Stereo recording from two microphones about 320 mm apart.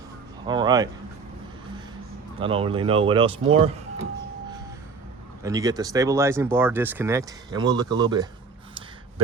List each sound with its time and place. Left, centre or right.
0.4 s speech: centre
2.4 s speech: centre
5.4 s speech: centre